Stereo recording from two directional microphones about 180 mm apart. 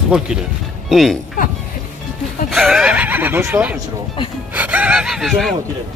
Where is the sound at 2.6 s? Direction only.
5° right (ahead or behind).